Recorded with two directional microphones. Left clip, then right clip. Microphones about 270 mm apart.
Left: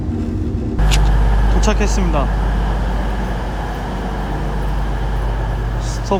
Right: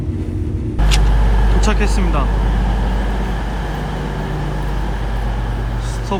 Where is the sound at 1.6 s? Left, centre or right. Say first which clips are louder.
Left 1 dB; centre.